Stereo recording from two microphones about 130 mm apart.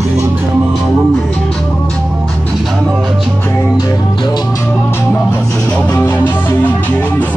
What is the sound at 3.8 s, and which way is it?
Music, 30° left (ahead or behind).